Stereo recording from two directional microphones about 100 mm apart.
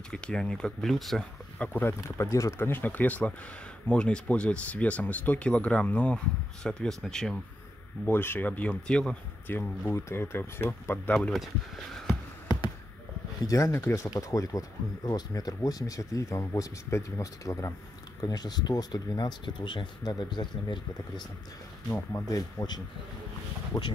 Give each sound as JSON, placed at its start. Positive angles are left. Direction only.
{"t": 0.1, "sound": "speech", "side_deg": 10}
{"t": 1.6, "sound": "speech", "side_deg": 20}
{"t": 8.1, "sound": "speech", "side_deg": 20}
{"t": 9.5, "sound": "speech", "side_deg": 25}
{"t": 11.1, "sound": "speech", "side_deg": 0}
{"t": 13.5, "sound": "speech", "side_deg": 30}
{"t": 21.9, "sound": "speech", "side_deg": 25}
{"t": 23.7, "sound": "speech", "side_deg": 45}